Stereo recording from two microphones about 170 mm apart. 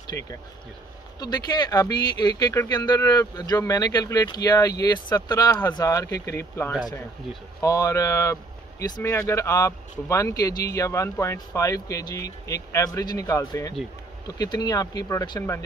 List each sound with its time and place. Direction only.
0.0 s speech: 20° left (ahead or behind)